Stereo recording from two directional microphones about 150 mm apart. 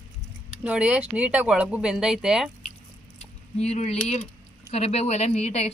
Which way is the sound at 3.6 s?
45° left (ahead or behind).